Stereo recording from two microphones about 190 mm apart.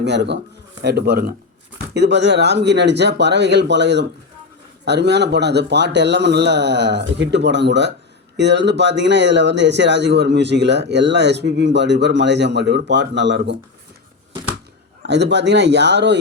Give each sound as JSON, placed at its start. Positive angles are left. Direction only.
{"t": 0.0, "sound": "speech", "side_deg": -65}
{"t": 1.9, "sound": "speech", "side_deg": -65}
{"t": 15.0, "sound": "speech", "side_deg": -65}